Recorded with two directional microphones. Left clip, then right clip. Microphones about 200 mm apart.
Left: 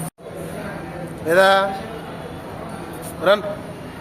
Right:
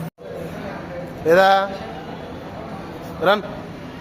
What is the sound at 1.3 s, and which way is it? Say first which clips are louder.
Speech: even; 25° right (ahead or behind).